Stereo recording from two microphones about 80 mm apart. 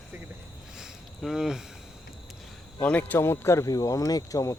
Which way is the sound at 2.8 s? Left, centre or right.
Left.